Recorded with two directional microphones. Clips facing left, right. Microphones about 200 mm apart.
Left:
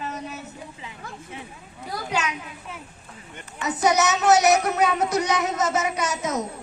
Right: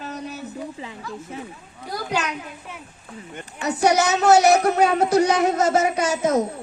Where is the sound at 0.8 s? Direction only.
35° right (ahead or behind).